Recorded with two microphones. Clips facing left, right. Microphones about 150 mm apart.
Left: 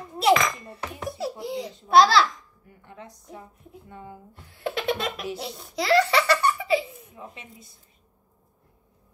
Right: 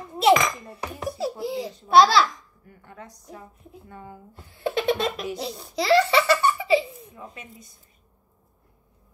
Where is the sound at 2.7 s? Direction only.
20° left (ahead or behind).